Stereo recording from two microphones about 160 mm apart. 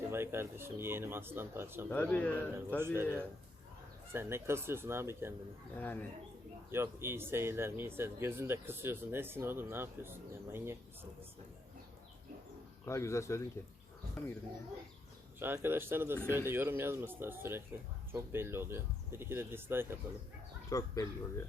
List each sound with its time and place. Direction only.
0.1 s speech: 15° right (ahead or behind)
1.9 s a man's voice: 10° left (ahead or behind)
2.7 s speech: 15° right (ahead or behind)
5.8 s a man's voice: 10° left (ahead or behind)
6.7 s speech: 15° right (ahead or behind)
12.8 s a man's voice: 15° left (ahead or behind)
15.4 s speech: 15° right (ahead or behind)
20.7 s speech: 20° left (ahead or behind)